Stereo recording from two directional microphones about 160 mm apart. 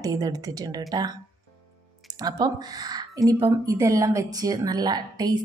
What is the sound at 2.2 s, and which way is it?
A woman's voice, 25° right (ahead or behind).